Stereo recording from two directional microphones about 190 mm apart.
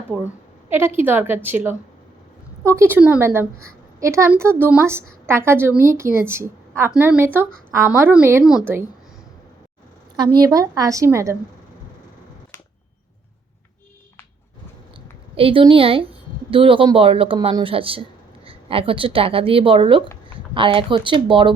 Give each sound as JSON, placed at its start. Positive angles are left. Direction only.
{"t": 0.1, "sound": "a woman's voice", "side_deg": -5}
{"t": 10.2, "sound": "a woman's voice", "side_deg": -20}
{"t": 15.4, "sound": "speech", "side_deg": -30}